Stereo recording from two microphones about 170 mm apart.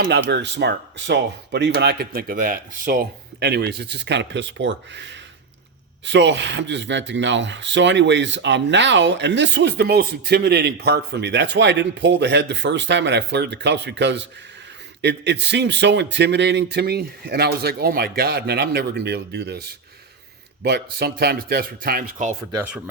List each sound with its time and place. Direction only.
0.0 s speech: 80° right; by 22.4 s 55° right (ahead or behind)